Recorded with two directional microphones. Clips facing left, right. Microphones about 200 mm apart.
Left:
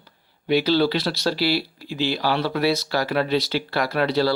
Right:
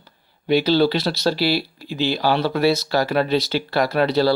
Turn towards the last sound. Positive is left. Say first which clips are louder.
# right 3 dB
turn(degrees=-25)  # may be behind; listen again after turning